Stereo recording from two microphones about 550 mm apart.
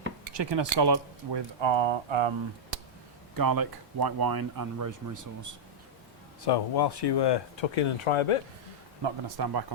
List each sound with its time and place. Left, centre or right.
0.3 s speech: right
3.3 s speech: right
6.4 s speech: left
9.0 s speech: right